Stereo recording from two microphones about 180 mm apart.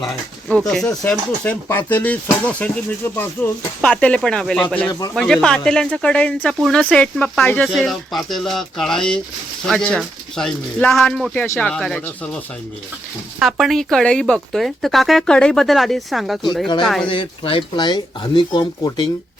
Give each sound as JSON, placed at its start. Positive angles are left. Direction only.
{"t": 0.7, "sound": "speech", "side_deg": 5}
{"t": 4.9, "sound": "speech", "side_deg": 20}
{"t": 5.1, "sound": "speech", "side_deg": 5}
{"t": 13.4, "sound": "speech", "side_deg": 0}
{"t": 17.1, "sound": "speech", "side_deg": 30}